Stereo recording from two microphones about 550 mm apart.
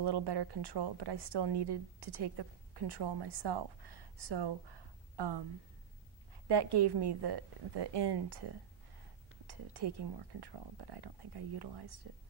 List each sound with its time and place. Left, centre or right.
0.0 s a woman's voice: right
6.4 s a woman's voice: right